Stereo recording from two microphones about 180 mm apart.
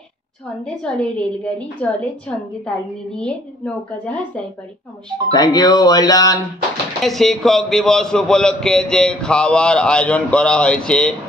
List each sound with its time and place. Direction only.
0.8 s a man's voice: 5° left (ahead or behind)
5.3 s speech: 20° left (ahead or behind)
7.0 s a man's voice: centre (ahead or behind)